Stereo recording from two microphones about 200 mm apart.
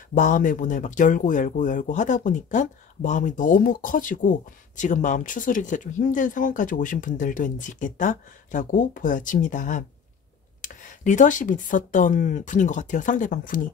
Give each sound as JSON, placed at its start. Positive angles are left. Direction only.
{"t": 0.1, "sound": "speech", "side_deg": 40}